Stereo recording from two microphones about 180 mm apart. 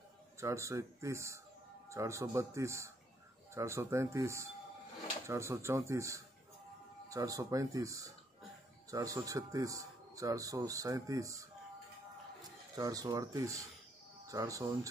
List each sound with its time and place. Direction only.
0.4 s a man's voice: 15° right (ahead or behind)